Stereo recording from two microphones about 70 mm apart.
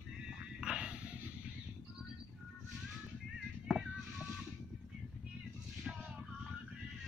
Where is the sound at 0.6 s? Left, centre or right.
Centre.